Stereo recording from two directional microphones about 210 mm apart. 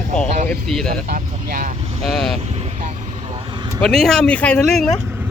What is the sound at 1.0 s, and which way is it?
Speech, 40° right (ahead or behind).